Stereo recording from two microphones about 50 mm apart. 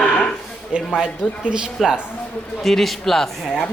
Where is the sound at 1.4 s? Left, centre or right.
Centre.